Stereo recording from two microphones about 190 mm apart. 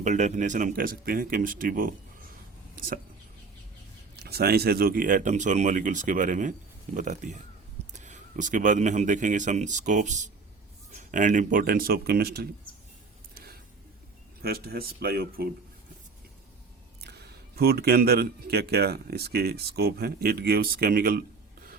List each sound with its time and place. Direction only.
0.0 s speech: 40° right (ahead or behind)
4.1 s speech: 55° right (ahead or behind)
13.3 s a sound: 55° right (ahead or behind)
14.4 s speech: 55° right (ahead or behind)
17.0 s speech: 60° right (ahead or behind)